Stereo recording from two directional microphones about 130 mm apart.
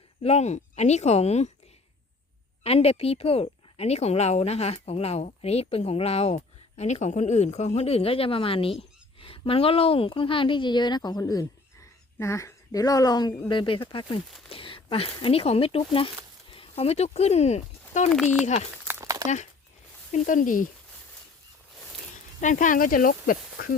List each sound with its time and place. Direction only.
0.2 s speech: 55° left (ahead or behind)
2.6 s speech: 50° left (ahead or behind)
18.9 s a sound: 20° right (ahead or behind)
20.1 s speech: 85° left
22.1 s speech: 85° left